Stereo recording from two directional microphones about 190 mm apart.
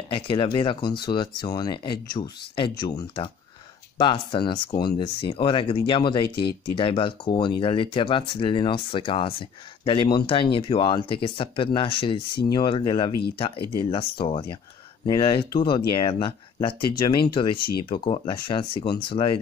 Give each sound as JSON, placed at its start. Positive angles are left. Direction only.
{"t": 0.1, "sound": "speech", "side_deg": 25}